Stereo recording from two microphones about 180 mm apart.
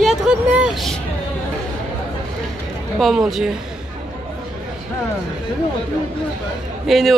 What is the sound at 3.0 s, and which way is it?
Speech, centre (ahead or behind).